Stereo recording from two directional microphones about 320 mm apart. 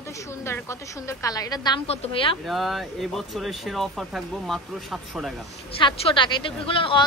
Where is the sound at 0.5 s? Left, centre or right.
Centre.